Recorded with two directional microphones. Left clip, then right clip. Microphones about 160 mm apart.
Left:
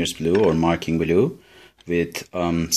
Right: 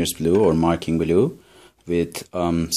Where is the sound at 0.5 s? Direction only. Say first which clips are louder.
Right 1 dB; 5° right (ahead or behind).